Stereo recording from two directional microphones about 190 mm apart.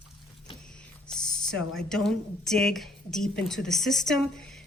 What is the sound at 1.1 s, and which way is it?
A woman's voice, 5° left (ahead or behind).